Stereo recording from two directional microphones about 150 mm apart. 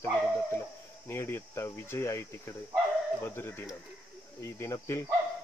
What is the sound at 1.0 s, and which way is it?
Speech, 15° left (ahead or behind).